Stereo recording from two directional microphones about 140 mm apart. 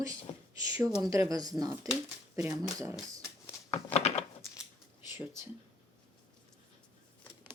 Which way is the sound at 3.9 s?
50° left (ahead or behind).